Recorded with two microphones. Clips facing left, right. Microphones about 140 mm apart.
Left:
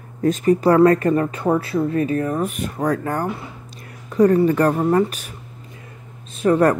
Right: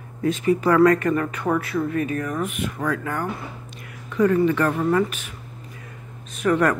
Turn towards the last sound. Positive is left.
turn(degrees=30)  # may be behind; listen again after turning